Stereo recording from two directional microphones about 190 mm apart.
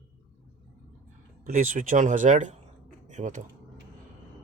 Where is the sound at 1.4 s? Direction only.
40° right (ahead or behind).